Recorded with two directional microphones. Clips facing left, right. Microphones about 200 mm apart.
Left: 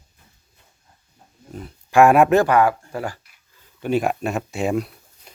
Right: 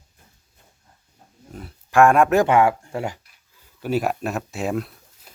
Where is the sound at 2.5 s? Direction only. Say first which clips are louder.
Even; 25° right (ahead or behind).